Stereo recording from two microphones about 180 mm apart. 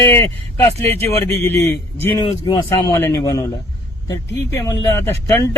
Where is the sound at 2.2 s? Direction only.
25° left (ahead or behind).